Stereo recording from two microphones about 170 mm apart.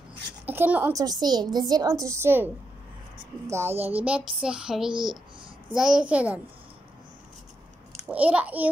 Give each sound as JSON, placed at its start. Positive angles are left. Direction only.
{"t": 0.5, "sound": "a child's voice", "side_deg": -10}
{"t": 1.0, "sound": "a woman's voice", "side_deg": -25}
{"t": 3.8, "sound": "child singing", "side_deg": -10}
{"t": 5.8, "sound": "a child's voice", "side_deg": -5}
{"t": 8.1, "sound": "a child's voice", "side_deg": -10}